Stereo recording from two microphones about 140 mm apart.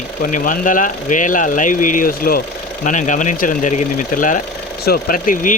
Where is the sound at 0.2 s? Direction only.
70° left (ahead or behind); by 2.4 s 90° left.